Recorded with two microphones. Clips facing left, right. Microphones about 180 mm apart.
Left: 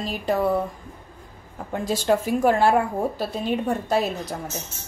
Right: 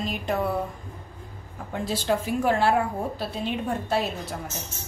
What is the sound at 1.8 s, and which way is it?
A woman's voice, 45° left (ahead or behind).